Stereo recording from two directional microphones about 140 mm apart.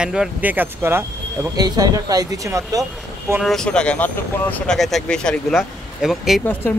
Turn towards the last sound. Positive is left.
turn(degrees=15)  # may be behind; listen again after turning